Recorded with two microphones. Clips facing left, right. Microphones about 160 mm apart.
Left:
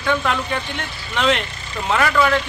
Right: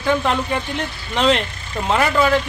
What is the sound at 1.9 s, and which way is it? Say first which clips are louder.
Speech: right 1 dB; 25° right (ahead or behind).